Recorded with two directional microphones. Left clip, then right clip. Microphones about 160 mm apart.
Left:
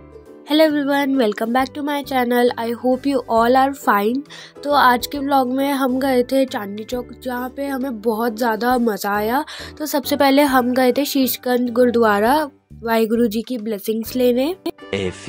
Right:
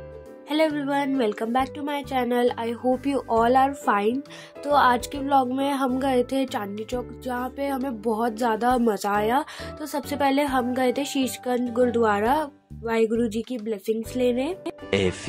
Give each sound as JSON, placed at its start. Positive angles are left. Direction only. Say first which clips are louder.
{"t": 0.5, "sound": "a woman's voice", "louder": "left 8 dB", "side_deg": 35}
{"t": 9.8, "sound": "a woman's voice", "louder": "left 9 dB", "side_deg": 40}
{"t": 14.9, "sound": "speech", "louder": "right 1 dB", "side_deg": 0}